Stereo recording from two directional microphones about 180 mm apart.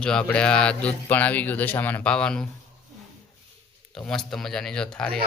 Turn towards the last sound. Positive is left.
turn(degrees=5)  # may be behind; listen again after turning